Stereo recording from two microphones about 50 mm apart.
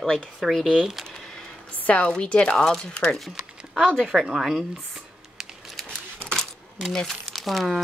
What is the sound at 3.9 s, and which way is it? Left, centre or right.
Speech, centre.